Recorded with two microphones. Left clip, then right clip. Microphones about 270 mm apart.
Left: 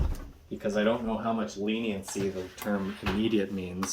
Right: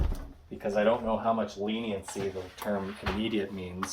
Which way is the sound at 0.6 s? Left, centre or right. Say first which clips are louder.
Right 1 dB; left.